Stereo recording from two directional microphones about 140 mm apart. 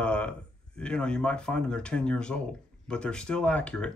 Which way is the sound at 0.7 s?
5° left (ahead or behind).